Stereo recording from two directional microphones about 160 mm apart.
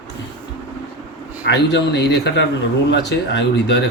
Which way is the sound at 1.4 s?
90° left.